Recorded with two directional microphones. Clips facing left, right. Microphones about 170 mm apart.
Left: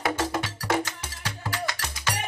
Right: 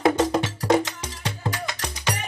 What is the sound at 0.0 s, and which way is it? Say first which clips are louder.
Music: right 7 dB; 20° right (ahead or behind).